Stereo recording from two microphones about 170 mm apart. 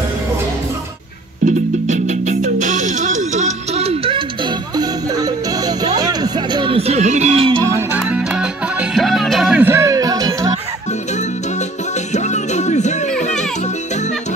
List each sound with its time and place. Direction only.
1.4 s music: 45° right (ahead or behind)
4.7 s music: 20° right (ahead or behind); by 7.5 s 40° right (ahead or behind)
7.6 s music: 15° right (ahead or behind)
12.1 s music: 45° left (ahead or behind)